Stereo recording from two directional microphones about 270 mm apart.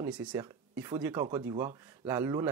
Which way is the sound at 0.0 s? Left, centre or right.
Centre.